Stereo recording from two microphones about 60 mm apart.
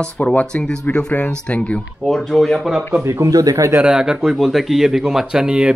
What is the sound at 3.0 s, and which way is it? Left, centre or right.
Speech, right.